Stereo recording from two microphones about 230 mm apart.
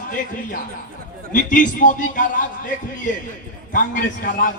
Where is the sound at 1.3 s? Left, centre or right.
Left.